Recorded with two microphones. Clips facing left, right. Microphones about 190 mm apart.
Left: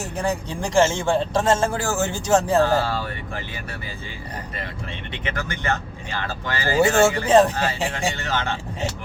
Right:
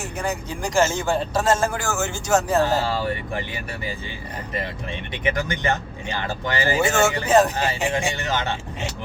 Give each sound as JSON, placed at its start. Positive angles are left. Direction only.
{"t": 0.0, "sound": "speech", "side_deg": 30}
{"t": 2.8, "sound": "speech", "side_deg": -15}
{"t": 5.1, "sound": "speech", "side_deg": -15}
{"t": 6.7, "sound": "speech", "side_deg": 35}
{"t": 7.5, "sound": "speech", "side_deg": -15}